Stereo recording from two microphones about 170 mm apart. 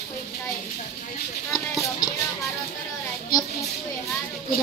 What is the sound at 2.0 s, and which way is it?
Music, 25° left (ahead or behind).